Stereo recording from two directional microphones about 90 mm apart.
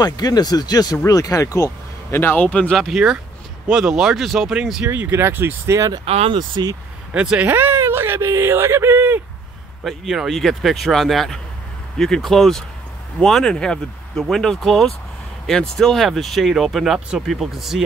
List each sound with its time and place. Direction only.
0.0 s speech: 50° left (ahead or behind); by 2.8 s 15° left (ahead or behind)
3.7 s speech: 5° right (ahead or behind)
4.8 s speech: 25° right (ahead or behind)
6.0 s speech: 75° right (ahead or behind)
7.2 s speech: 15° right (ahead or behind)
9.8 s speech: 5° right (ahead or behind)